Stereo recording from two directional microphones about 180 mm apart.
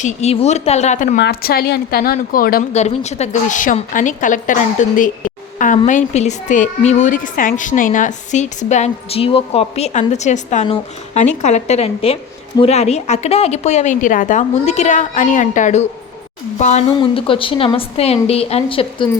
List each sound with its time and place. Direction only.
0.0 s a woman's voice: 40° left (ahead or behind)
1.2 s a woman's voice: 60° left (ahead or behind)
2.7 s a woman's voice: 40° left (ahead or behind)
17.0 s a woman's voice: 30° left (ahead or behind)